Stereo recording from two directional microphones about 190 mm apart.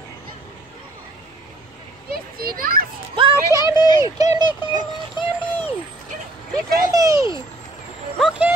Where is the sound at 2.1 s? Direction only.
50° right (ahead or behind).